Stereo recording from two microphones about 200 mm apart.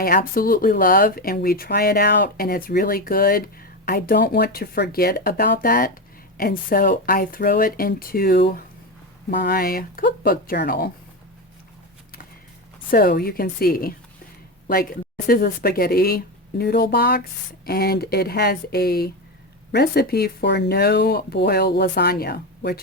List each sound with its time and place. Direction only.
0.0 s speech: 45° left (ahead or behind)
12.9 s speech: 50° left (ahead or behind)